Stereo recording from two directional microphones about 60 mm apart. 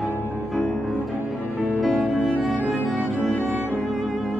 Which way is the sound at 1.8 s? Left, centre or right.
Centre.